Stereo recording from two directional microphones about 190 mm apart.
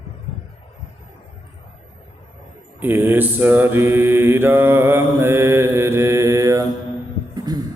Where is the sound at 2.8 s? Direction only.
10° right (ahead or behind).